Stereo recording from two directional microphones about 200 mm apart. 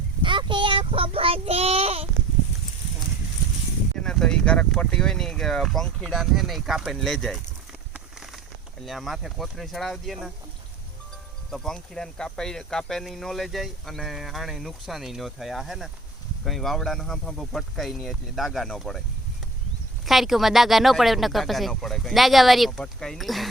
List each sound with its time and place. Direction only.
0.2 s child singing: 25° right (ahead or behind)
3.9 s speech: 5° left (ahead or behind)
7.9 s rain on surface: centre (ahead or behind)
8.9 s speech: centre (ahead or behind)
11.5 s speech: centre (ahead or behind)
20.1 s speech: centre (ahead or behind)